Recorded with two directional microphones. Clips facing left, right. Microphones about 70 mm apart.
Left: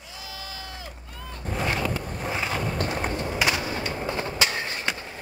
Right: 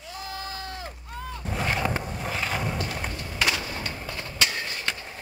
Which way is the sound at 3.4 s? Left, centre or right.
Centre.